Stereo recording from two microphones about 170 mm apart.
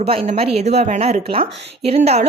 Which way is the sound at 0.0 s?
35° right (ahead or behind).